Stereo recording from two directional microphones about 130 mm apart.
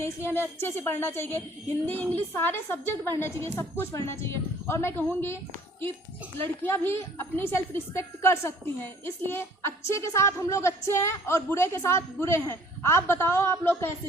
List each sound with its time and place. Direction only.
0.0 s a woman's voice: 20° left (ahead or behind)
6.6 s a woman's voice: 15° left (ahead or behind)